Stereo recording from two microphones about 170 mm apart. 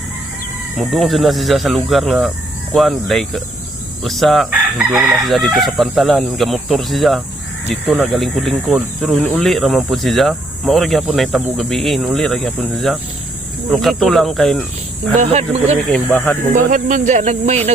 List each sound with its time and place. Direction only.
0.8 s speech: centre (ahead or behind)
15.2 s speech: 40° right (ahead or behind)
15.9 s speech: 5° left (ahead or behind)
16.7 s speech: 45° right (ahead or behind)